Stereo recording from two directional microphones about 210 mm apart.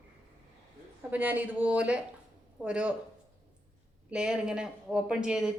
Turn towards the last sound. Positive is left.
turn(degrees=-5)  # may be behind; listen again after turning